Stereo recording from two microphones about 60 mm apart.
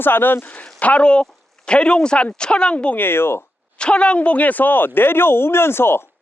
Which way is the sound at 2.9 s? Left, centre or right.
Left.